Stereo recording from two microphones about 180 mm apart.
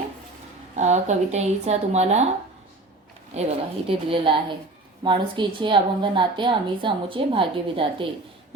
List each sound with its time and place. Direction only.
0.8 s speech: 40° right (ahead or behind)
3.3 s a woman's voice: 35° right (ahead or behind)